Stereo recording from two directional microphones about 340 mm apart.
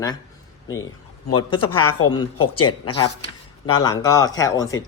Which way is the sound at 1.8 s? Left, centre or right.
Left.